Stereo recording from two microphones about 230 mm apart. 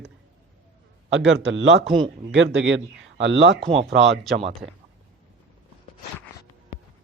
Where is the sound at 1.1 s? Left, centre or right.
Right.